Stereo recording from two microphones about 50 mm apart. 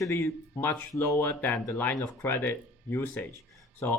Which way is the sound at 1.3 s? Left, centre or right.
Left.